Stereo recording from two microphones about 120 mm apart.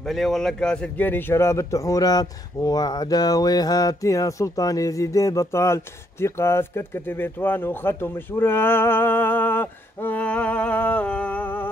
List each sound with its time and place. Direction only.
0.1 s speech: 5° left (ahead or behind)